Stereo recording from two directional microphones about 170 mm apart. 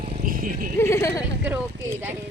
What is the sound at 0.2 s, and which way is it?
Vehicle, 55° right (ahead or behind).